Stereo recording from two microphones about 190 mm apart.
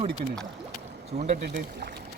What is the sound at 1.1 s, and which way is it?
Speech, 35° right (ahead or behind).